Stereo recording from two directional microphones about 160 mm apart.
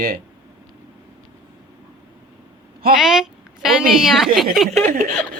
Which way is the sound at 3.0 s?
5° right (ahead or behind).